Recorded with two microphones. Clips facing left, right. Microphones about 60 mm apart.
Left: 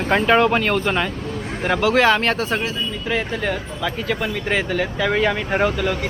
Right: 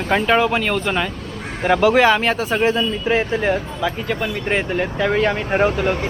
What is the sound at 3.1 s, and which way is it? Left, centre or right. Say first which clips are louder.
Speech: right 4 dB; right.